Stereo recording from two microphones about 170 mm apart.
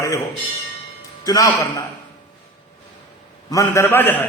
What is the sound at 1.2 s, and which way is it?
Speech, 20° left (ahead or behind).